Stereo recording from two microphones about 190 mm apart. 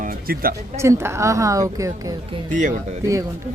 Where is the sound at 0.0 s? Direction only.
50° right (ahead or behind).